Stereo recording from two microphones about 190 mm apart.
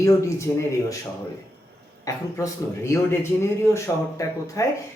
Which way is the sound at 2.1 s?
20° left (ahead or behind).